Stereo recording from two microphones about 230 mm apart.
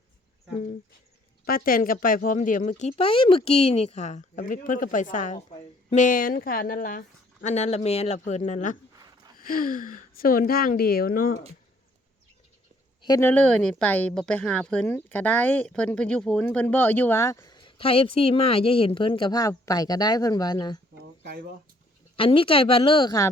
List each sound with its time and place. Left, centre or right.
1.5 s a man's voice: left
13.0 s speech: centre
22.1 s a man's voice: left